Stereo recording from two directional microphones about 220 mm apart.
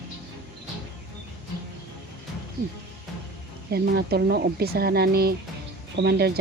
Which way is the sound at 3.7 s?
45° right (ahead or behind).